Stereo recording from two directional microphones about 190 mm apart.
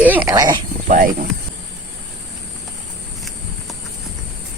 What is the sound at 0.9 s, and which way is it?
Speech, 40° right (ahead or behind).